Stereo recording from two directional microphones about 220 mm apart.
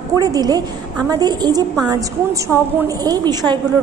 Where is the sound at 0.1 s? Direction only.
15° right (ahead or behind).